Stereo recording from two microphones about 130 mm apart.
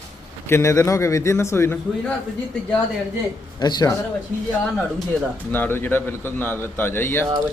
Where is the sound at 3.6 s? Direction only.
30° left (ahead or behind).